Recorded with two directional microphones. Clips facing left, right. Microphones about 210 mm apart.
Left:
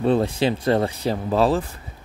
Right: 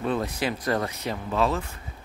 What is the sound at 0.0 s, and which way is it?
Speech, 30° left (ahead or behind).